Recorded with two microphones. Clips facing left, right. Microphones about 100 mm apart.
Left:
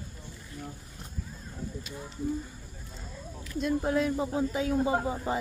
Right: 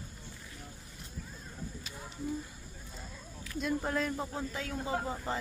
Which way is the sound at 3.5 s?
Centre (ahead or behind).